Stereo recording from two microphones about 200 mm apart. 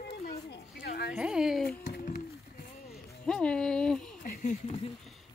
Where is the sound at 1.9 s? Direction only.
45° left (ahead or behind).